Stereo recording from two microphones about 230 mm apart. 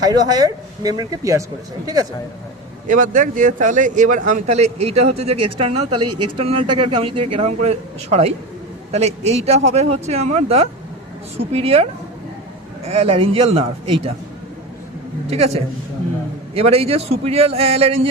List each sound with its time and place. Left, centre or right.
0.1 s speech: centre
2.8 s speech: right
5.1 s speech: right
5.5 s a man's voice: right
6.0 s speech: right
6.3 s a man's voice: right
12.9 s a man's voice: right
15.3 s a man's voice: right